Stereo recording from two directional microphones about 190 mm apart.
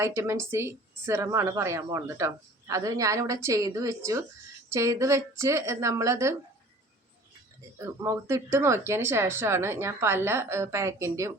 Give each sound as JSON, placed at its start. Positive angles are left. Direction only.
{"t": 0.0, "sound": "speech", "side_deg": -15}
{"t": 7.8, "sound": "speech", "side_deg": -15}